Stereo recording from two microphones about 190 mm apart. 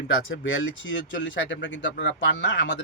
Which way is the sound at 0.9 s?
75° left (ahead or behind).